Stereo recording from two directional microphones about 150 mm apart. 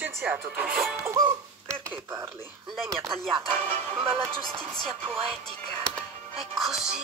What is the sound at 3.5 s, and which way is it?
Music, 15° left (ahead or behind).